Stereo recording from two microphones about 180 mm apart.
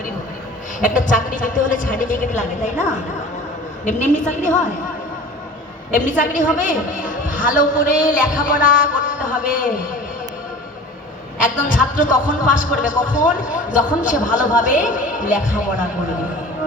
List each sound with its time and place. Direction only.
0.8 s a woman's voice: 45° left (ahead or behind)
3.8 s a woman's voice: 45° left (ahead or behind)
5.9 s a woman's voice: 45° left (ahead or behind)
11.6 s a woman's voice: 45° left (ahead or behind)